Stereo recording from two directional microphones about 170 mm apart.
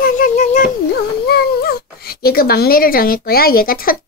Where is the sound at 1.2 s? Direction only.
65° left (ahead or behind).